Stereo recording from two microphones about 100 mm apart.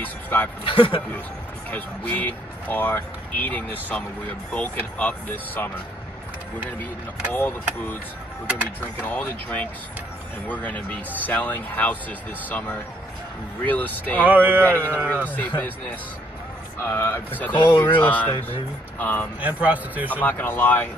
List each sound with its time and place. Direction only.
0.0 s a sound: 20° left (ahead or behind)
0.7 s a man's voice: 60° left (ahead or behind)
1.7 s speech: 15° left (ahead or behind)
7.3 s speech: 15° left (ahead or behind)
9.0 s speech: 15° left (ahead or behind)
14.2 s speech: 20° right (ahead or behind)
15.2 s speech: 20° left (ahead or behind)
16.9 s speech: 25° left (ahead or behind)
17.6 s speech: 45° left (ahead or behind)
17.8 s speech: 15° left (ahead or behind)
19.4 s a man's voice: 15° right (ahead or behind)
20.1 s speech: 15° left (ahead or behind)